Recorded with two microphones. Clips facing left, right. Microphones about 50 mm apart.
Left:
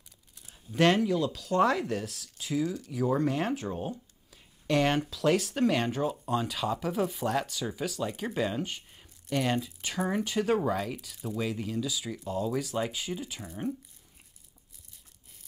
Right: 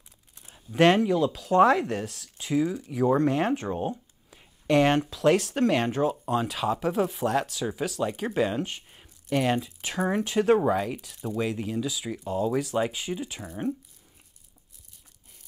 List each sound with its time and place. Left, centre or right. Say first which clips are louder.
0.7 s speech: right 4 dB; centre
3.6 s speech: right 5 dB; right
3.9 s a sound: right 3 dB; centre
5.1 s speech: right 4 dB; centre
8.1 s speech: right 5 dB; centre